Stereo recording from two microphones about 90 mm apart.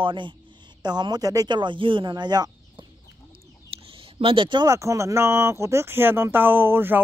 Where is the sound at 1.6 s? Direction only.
65° right (ahead or behind).